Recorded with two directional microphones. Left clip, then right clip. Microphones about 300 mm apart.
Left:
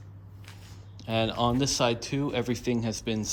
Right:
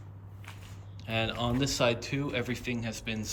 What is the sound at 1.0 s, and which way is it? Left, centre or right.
Speech, centre.